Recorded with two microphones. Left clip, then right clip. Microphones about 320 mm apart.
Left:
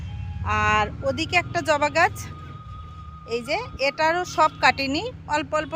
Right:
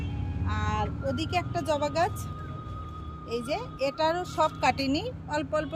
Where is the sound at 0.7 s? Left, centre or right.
Centre.